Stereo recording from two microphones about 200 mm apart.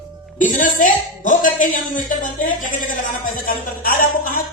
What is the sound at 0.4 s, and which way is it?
Speech, 40° left (ahead or behind).